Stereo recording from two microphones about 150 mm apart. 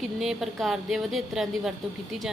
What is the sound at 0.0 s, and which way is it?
Speech, centre (ahead or behind).